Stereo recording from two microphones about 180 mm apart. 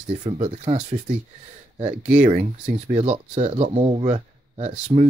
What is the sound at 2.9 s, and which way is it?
Speech, 35° right (ahead or behind).